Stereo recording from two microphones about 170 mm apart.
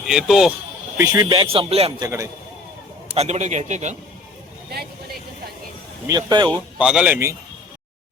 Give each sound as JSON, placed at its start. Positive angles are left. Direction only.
{"t": 0.0, "sound": "speech", "side_deg": 0}
{"t": 0.9, "sound": "speech", "side_deg": -25}
{"t": 2.0, "sound": "speech", "side_deg": -20}
{"t": 3.2, "sound": "a man's voice", "side_deg": -40}
{"t": 6.1, "sound": "speech", "side_deg": -25}
{"t": 6.7, "sound": "speech", "side_deg": -5}